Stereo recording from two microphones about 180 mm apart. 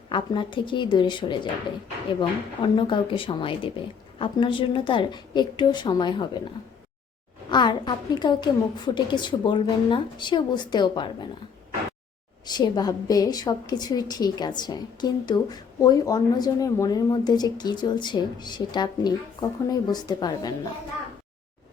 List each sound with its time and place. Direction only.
0.1 s a woman's voice: 25° left (ahead or behind)
2.6 s a woman's voice: 25° left (ahead or behind)
7.5 s a woman's voice: 25° left (ahead or behind)
12.5 s a woman's voice: 25° left (ahead or behind)